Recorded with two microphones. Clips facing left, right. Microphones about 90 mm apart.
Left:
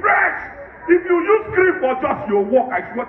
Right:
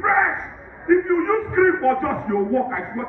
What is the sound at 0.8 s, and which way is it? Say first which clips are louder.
Speech: left 3 dB; 80° left.